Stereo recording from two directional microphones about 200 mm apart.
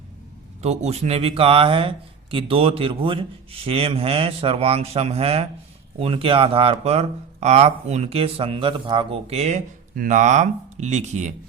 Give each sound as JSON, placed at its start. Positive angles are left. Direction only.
{"t": 0.6, "sound": "a man's voice", "side_deg": -35}